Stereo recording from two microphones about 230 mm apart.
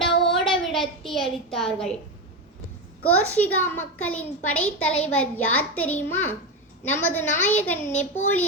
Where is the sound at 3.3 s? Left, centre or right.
Centre.